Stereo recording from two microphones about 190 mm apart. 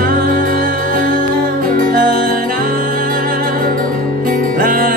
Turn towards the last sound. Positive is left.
turn(degrees=-45)  # may be behind; listen again after turning